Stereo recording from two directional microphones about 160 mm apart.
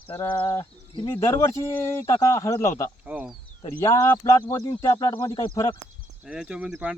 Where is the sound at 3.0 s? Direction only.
10° right (ahead or behind).